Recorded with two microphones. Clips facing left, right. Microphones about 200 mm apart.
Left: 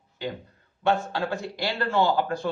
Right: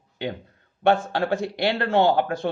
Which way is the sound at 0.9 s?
65° right (ahead or behind).